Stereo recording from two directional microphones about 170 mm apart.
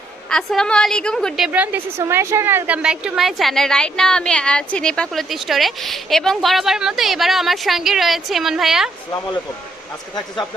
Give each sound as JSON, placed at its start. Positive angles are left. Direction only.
{"t": 0.3, "sound": "a woman's voice", "side_deg": 5}
{"t": 1.5, "sound": "a woman's voice", "side_deg": -10}